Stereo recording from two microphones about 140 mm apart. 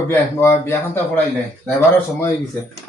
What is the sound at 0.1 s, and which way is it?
A man's voice, 15° left (ahead or behind).